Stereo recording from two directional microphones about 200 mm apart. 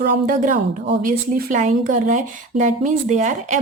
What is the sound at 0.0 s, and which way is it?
Speech, 45° right (ahead or behind).